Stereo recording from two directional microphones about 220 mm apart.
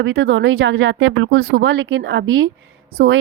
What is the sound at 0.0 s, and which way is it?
A woman's voice, 60° right (ahead or behind).